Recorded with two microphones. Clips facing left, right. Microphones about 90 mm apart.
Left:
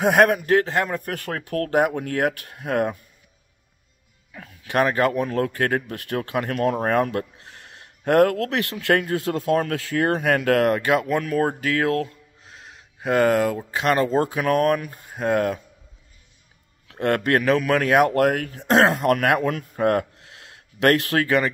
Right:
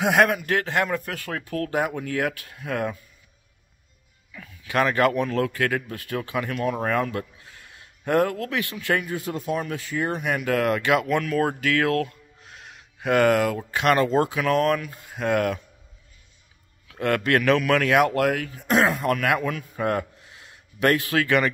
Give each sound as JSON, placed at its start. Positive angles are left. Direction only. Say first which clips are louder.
{"t": 0.0, "sound": "speech", "louder": "left 3 dB", "side_deg": 40}
{"t": 1.0, "sound": "speech", "louder": "left 3 dB", "side_deg": 50}
{"t": 4.3, "sound": "a sound", "louder": "left 2 dB", "side_deg": 40}
{"t": 4.8, "sound": "speech", "louder": "right 2 dB", "side_deg": 30}
{"t": 5.9, "sound": "speech", "louder": "left 3 dB", "side_deg": 60}
{"t": 10.7, "sound": "speech", "louder": "left 1 dB", "side_deg": 35}
{"t": 16.8, "sound": "speech", "louder": "left 2 dB", "side_deg": 40}
{"t": 18.7, "sound": "speech", "louder": "left 4 dB", "side_deg": 75}
{"t": 20.3, "sound": "a sound", "louder": "left 4 dB", "side_deg": 70}
{"t": 21.1, "sound": "speech", "louder": "left 1 dB", "side_deg": 30}